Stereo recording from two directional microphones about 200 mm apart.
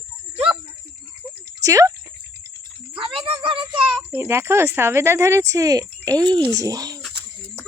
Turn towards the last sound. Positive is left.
turn(degrees=-20)  # may be behind; listen again after turning